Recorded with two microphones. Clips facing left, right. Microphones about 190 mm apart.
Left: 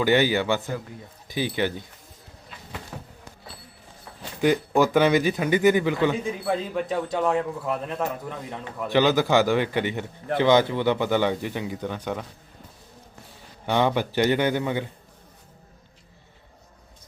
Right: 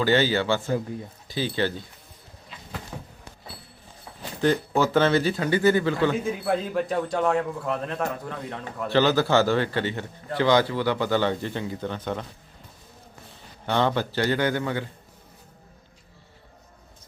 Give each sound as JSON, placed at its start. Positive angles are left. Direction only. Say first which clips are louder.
{"t": 0.0, "sound": "speech", "louder": "left 1 dB", "side_deg": 15}
{"t": 2.9, "sound": "a sound", "louder": "even", "side_deg": 0}
{"t": 4.4, "sound": "speech", "louder": "left 2 dB", "side_deg": 15}
{"t": 6.4, "sound": "a man's voice", "louder": "right 1 dB", "side_deg": 0}
{"t": 13.7, "sound": "speech", "louder": "left 1 dB", "side_deg": 15}